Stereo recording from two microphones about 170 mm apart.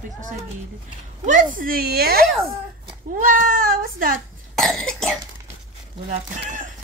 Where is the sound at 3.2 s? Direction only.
50° right (ahead or behind).